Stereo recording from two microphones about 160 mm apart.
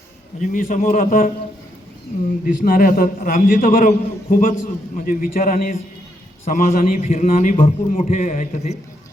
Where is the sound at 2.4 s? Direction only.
60° left (ahead or behind).